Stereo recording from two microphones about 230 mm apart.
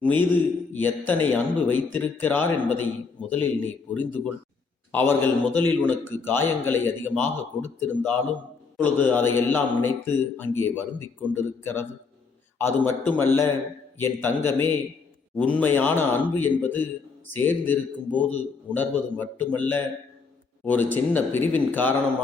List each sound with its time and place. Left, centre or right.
0.0 s a man's voice: centre